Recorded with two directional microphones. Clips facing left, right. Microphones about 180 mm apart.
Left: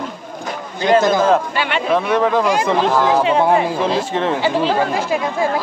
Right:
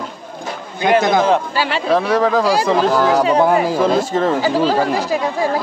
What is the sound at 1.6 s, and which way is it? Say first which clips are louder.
Speech: right 1 dB; 35° right (ahead or behind).